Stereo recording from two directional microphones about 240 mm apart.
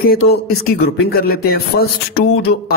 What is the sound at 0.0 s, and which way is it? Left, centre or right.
A man's voice, left.